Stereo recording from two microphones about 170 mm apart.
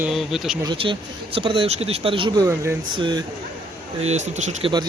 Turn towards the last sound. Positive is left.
turn(degrees=-45)  # may be behind; listen again after turning